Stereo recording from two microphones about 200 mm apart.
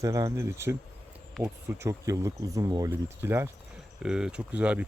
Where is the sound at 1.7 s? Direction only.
15° right (ahead or behind).